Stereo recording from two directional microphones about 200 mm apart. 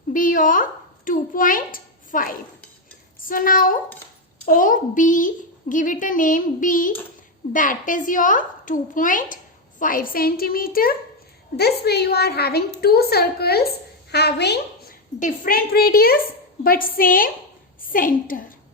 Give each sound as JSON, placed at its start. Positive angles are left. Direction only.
{"t": 0.1, "sound": "a woman's voice", "side_deg": 40}